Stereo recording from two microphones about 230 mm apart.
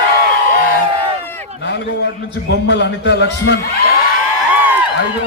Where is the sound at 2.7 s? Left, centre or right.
Left.